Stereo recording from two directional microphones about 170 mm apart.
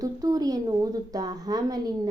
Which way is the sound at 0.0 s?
20° right (ahead or behind).